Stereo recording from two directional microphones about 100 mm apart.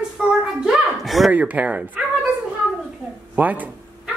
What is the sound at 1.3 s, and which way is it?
Speech, 15° right (ahead or behind).